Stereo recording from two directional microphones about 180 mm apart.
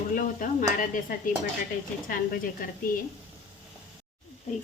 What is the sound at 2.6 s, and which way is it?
Speech, 50° left (ahead or behind).